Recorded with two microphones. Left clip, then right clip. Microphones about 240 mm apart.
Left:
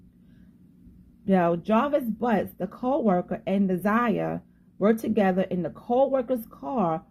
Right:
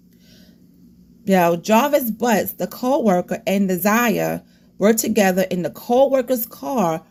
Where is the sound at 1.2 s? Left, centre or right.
Right.